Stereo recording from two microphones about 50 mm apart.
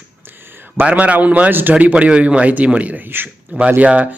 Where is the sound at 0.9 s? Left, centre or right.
Right.